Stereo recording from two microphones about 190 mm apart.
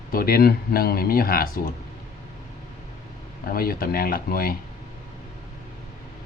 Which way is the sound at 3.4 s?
50° left (ahead or behind).